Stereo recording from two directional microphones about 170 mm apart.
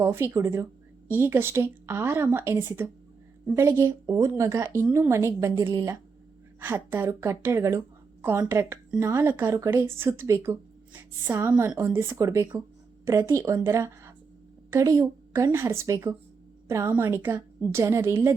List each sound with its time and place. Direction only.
0.0 s a woman's voice: 15° right (ahead or behind)